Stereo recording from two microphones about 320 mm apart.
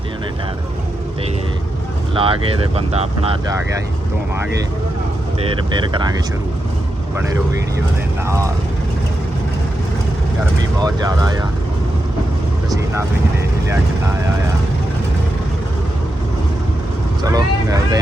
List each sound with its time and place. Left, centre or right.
2.1 s speech: centre
5.9 s speech: centre
8.2 s speech: centre
10.8 s speech: centre
12.7 s speech: centre
17.2 s speech: centre